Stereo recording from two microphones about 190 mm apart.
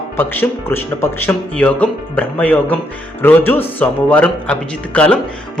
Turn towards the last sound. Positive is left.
turn(degrees=5)  # may be behind; listen again after turning